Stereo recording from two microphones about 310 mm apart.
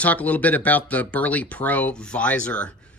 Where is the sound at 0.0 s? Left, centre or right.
Centre.